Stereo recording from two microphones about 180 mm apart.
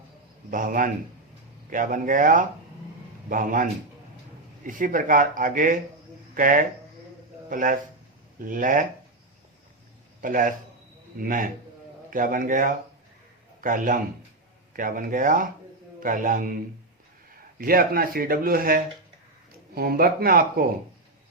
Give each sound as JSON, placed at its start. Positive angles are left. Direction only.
{"t": 0.5, "sound": "speech", "side_deg": -50}
{"t": 10.2, "sound": "a man's voice", "side_deg": -50}
{"t": 17.6, "sound": "speech", "side_deg": -55}